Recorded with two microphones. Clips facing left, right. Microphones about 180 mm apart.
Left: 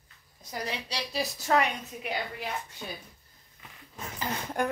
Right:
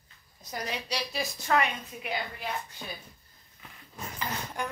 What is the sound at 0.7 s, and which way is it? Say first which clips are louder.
A woman's voice: right 3 dB; 30° left (ahead or behind).